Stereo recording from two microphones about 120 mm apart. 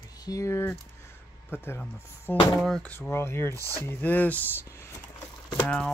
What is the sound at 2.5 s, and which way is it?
Speech, centre (ahead or behind).